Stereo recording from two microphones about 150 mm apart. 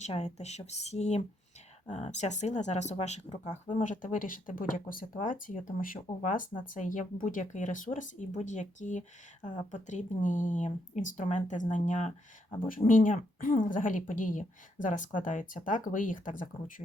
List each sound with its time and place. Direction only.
0.0 s speech: 50° left (ahead or behind)
12.5 s speech: 65° left (ahead or behind)